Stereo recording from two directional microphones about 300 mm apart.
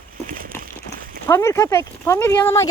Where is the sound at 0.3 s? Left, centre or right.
Right.